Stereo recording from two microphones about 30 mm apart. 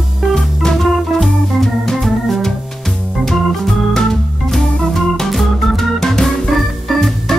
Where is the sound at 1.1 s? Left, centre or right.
Centre.